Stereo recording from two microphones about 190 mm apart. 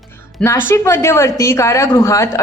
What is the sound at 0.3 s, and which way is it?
A woman's voice, 10° left (ahead or behind).